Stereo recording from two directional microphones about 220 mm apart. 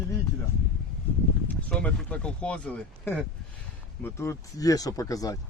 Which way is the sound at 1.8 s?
5° left (ahead or behind).